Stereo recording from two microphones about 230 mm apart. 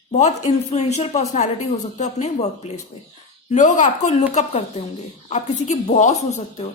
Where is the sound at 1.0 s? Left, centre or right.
Left.